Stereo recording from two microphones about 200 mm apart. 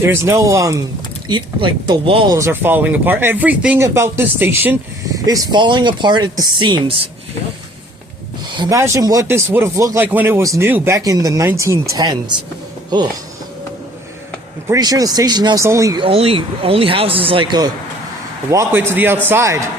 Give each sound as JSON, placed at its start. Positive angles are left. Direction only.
{"t": 0.0, "sound": "speech", "side_deg": -10}
{"t": 8.5, "sound": "speech", "side_deg": -15}
{"t": 14.7, "sound": "speech", "side_deg": -20}
{"t": 16.0, "sound": "speech", "side_deg": -30}
{"t": 18.5, "sound": "speech", "side_deg": -10}